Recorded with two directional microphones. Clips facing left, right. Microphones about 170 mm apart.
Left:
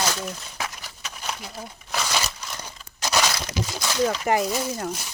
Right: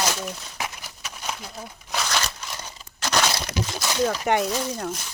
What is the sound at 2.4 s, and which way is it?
Crumpling, 5° right (ahead or behind).